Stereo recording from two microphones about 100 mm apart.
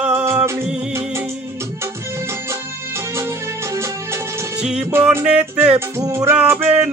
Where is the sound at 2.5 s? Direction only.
25° right (ahead or behind).